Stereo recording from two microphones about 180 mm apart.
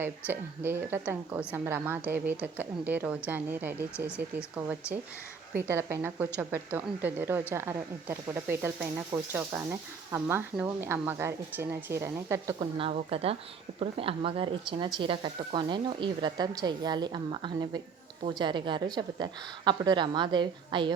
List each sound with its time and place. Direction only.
0.0 s a woman's voice: 10° right (ahead or behind)
5.5 s a woman's voice: 15° right (ahead or behind)
12.5 s a woman's voice: 30° right (ahead or behind)